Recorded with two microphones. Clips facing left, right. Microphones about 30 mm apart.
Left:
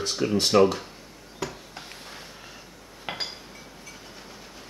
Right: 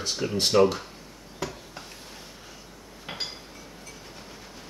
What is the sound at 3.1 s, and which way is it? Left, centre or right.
Chink, centre.